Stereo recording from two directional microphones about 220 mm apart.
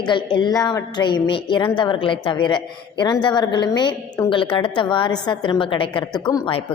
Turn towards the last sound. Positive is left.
turn(degrees=20)  # may be behind; listen again after turning